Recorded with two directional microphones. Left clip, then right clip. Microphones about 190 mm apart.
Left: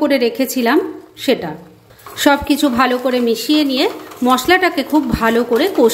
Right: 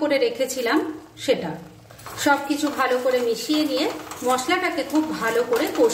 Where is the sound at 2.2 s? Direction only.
60° left (ahead or behind).